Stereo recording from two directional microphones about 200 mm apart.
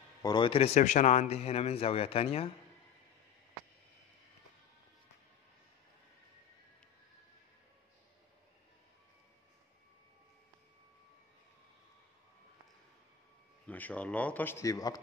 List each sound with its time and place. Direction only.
0.2 s a man's voice: 25° left (ahead or behind)
13.7 s speech: 10° left (ahead or behind)